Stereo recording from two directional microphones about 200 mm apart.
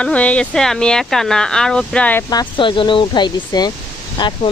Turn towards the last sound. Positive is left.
turn(degrees=25)  # may be behind; listen again after turning